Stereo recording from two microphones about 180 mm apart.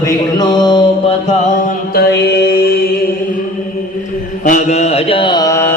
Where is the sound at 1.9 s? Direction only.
60° left (ahead or behind).